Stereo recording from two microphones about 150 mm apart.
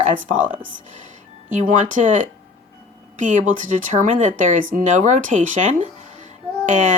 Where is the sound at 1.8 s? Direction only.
60° right (ahead or behind).